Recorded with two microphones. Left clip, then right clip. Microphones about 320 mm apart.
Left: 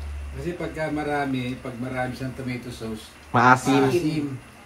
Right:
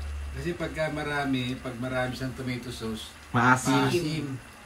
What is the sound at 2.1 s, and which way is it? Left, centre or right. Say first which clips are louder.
A man's voice: left 2 dB; centre.